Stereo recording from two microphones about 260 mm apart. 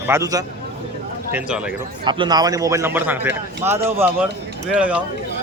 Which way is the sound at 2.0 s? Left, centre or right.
Centre.